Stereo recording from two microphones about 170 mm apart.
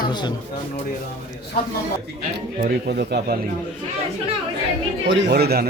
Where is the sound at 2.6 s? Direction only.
60° right (ahead or behind); by 3.3 s 75° right (ahead or behind).